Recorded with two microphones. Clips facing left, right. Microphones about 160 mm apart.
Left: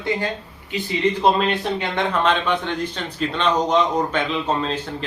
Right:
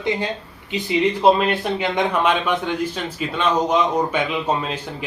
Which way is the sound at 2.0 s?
10° right (ahead or behind).